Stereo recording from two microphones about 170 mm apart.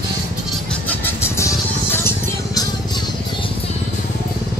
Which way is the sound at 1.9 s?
15° left (ahead or behind).